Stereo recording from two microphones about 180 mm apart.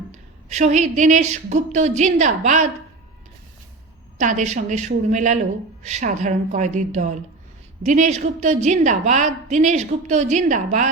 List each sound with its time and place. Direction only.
0.1 s a woman's voice: 40° right (ahead or behind)
4.2 s a woman's voice: 45° right (ahead or behind)